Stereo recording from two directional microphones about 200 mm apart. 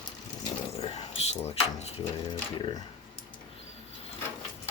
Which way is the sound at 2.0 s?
25° left (ahead or behind).